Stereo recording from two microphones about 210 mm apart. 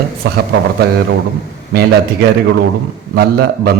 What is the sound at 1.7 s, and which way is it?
A man's voice, 50° right (ahead or behind).